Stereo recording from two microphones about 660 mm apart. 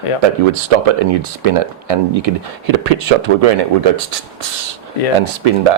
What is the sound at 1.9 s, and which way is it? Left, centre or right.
Speech, right.